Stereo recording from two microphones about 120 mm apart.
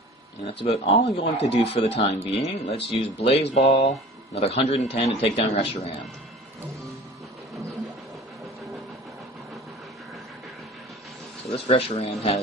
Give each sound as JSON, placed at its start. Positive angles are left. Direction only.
{"t": 0.4, "sound": "speech", "side_deg": 60}
{"t": 11.5, "sound": "speech", "side_deg": 55}